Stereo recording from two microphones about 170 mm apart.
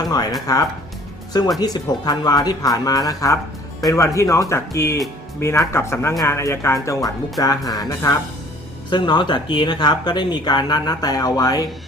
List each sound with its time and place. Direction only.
0.0 s speech: 20° left (ahead or behind)